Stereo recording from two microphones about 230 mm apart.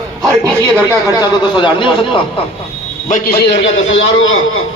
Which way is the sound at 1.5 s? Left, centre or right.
Centre.